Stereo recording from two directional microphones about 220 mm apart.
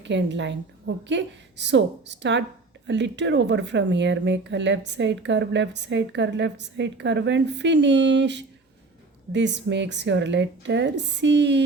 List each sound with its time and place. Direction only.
0.0 s a woman's voice: 55° right (ahead or behind)